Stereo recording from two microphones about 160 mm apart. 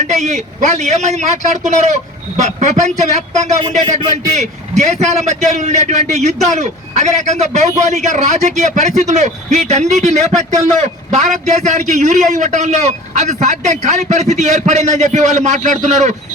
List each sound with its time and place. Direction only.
0.0 s a man's voice: 45° right (ahead or behind)